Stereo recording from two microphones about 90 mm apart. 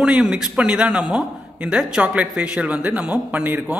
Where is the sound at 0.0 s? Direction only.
10° right (ahead or behind).